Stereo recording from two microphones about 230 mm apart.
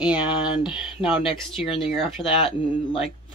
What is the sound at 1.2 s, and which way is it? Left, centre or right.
Speech, left.